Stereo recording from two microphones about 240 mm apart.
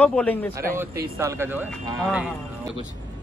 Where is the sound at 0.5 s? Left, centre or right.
Centre.